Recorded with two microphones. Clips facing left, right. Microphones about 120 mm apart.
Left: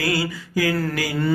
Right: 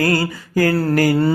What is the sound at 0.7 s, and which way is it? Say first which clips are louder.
Mantra: right 6 dB; 35° right (ahead or behind).